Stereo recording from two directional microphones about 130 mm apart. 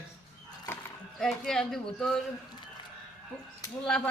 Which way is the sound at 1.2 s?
5° left (ahead or behind).